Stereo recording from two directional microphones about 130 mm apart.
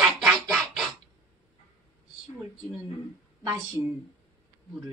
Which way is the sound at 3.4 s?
30° right (ahead or behind).